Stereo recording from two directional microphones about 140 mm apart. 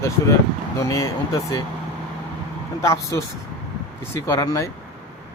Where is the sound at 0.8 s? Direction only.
20° left (ahead or behind).